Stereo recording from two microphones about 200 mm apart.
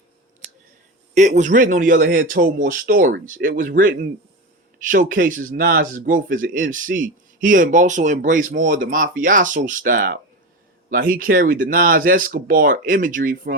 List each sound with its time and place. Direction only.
1.4 s a man's voice: 40° right (ahead or behind)